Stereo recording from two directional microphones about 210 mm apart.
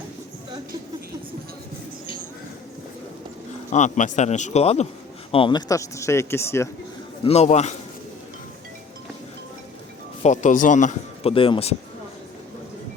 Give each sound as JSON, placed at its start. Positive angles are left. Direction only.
{"t": 3.7, "sound": "a man's voice", "side_deg": 35}
{"t": 7.3, "sound": "a man's voice", "side_deg": 30}
{"t": 10.2, "sound": "a man's voice", "side_deg": 35}